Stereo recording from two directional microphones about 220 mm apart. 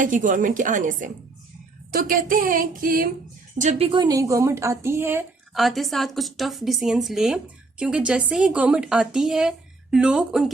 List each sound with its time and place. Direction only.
0.0 s speech: 35° right (ahead or behind)
3.6 s a woman's voice: 30° right (ahead or behind); by 10.5 s 5° right (ahead or behind)